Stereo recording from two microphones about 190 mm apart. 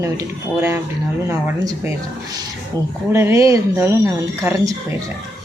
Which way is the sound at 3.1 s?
15° right (ahead or behind).